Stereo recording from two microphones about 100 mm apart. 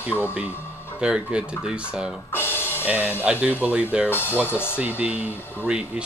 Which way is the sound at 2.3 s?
20° left (ahead or behind).